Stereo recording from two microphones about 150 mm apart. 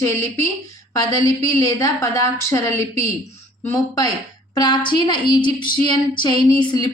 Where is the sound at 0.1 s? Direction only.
20° left (ahead or behind).